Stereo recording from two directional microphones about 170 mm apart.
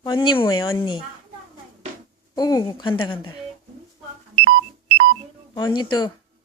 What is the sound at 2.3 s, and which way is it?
Speech, 25° left (ahead or behind).